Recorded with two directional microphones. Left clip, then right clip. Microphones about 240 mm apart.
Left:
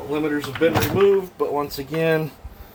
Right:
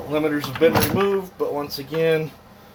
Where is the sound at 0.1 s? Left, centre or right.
Centre.